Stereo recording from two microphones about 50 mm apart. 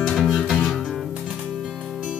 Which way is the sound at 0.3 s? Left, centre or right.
Centre.